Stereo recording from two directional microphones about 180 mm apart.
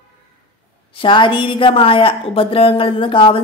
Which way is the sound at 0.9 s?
25° left (ahead or behind).